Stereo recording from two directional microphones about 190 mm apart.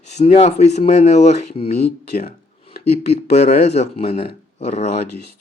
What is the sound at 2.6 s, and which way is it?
Speech, 35° left (ahead or behind).